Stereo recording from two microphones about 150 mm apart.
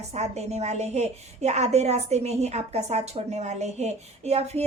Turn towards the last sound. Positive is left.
turn(degrees=-45)  # may be behind; listen again after turning